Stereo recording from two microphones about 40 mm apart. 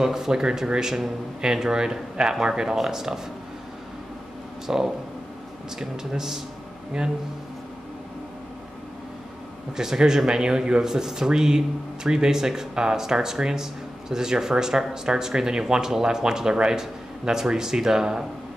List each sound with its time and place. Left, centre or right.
0.0 s speech: centre
4.6 s speech: centre
9.8 s speech: centre